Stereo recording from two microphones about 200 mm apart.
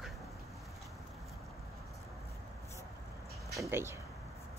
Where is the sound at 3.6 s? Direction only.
15° right (ahead or behind).